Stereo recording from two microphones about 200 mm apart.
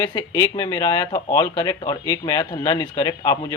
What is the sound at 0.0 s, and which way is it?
Speech, 20° left (ahead or behind).